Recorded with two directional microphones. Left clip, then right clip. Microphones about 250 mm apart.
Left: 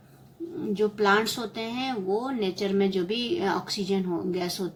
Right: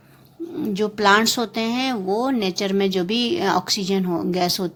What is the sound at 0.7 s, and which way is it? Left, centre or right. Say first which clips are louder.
Speech: right 6 dB; right.